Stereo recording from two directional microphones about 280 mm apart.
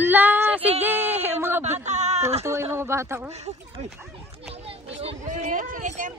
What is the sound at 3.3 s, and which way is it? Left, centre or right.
Speech, right.